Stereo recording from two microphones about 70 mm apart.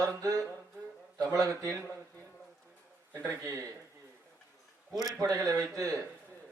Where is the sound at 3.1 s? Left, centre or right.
Right.